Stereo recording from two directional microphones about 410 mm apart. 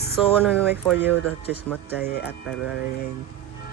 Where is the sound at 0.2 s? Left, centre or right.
Centre.